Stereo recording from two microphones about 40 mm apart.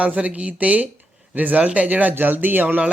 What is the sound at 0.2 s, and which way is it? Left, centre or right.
Speech, right.